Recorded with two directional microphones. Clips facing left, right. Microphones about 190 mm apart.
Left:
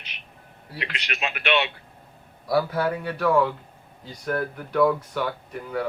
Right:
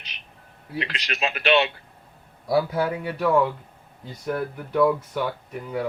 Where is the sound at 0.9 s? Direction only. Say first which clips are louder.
Even; 35° right (ahead or behind).